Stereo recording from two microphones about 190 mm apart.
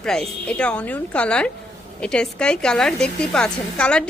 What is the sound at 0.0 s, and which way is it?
A woman's voice, 5° left (ahead or behind).